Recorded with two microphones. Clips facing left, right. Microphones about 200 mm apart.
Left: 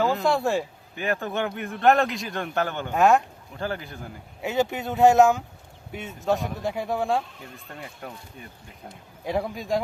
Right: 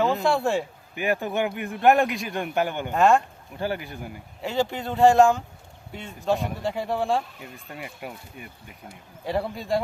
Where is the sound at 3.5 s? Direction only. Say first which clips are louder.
Right 2 dB; 15° right (ahead or behind).